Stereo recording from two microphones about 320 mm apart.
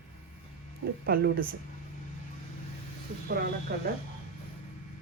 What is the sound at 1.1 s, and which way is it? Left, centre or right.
Speech, right.